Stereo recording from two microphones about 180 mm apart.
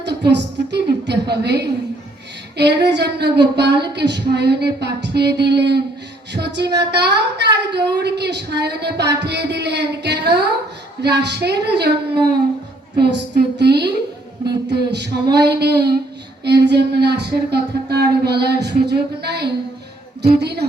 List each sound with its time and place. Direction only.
0.0 s a woman's voice: 70° right (ahead or behind)
13.0 s female singing: 65° right (ahead or behind)
16.4 s a woman's voice: 70° right (ahead or behind)
20.4 s female singing: 65° right (ahead or behind)